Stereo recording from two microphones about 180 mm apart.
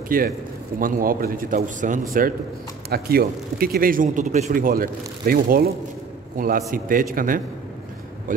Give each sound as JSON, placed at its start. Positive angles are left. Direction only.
{"t": 0.1, "sound": "a man's voice", "side_deg": -50}
{"t": 2.9, "sound": "a man's voice", "side_deg": -60}